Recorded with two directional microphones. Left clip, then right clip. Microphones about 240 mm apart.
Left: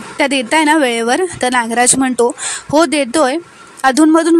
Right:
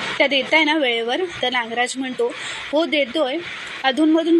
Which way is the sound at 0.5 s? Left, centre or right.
Left.